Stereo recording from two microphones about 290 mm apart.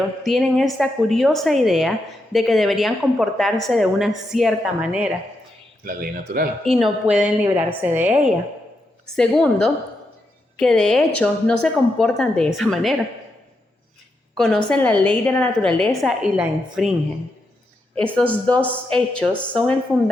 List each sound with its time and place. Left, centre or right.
0.2 s a woman's voice: centre
5.8 s speech: right
7.1 s a woman's voice: centre
14.3 s a woman's voice: centre
17.9 s a woman's voice: centre